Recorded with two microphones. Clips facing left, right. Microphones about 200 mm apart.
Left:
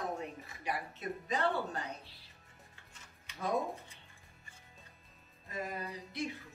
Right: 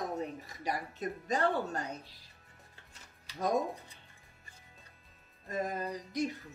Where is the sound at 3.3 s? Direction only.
40° right (ahead or behind).